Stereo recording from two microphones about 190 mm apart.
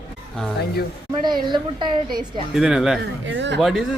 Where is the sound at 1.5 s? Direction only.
25° right (ahead or behind).